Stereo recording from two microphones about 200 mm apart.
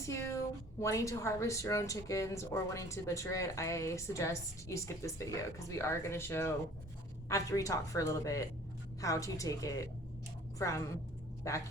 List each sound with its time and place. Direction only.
0.0 s a woman's voice: 15° left (ahead or behind)